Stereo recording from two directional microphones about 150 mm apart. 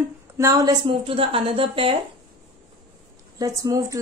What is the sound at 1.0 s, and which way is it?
Speech, 35° right (ahead or behind).